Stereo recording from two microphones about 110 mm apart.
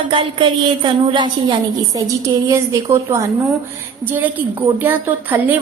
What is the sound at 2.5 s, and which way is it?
A woman's voice, 25° right (ahead or behind).